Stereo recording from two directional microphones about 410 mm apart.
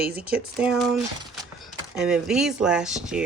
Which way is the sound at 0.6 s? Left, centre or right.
Centre.